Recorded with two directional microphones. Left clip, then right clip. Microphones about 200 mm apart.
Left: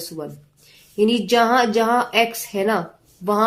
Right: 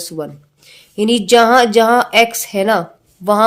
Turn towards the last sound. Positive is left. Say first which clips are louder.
# right 7 dB
turn(degrees=-45)  # may be behind; listen again after turning